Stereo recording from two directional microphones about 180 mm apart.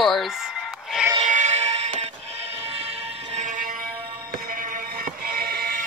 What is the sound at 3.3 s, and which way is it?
Music, 45° right (ahead or behind).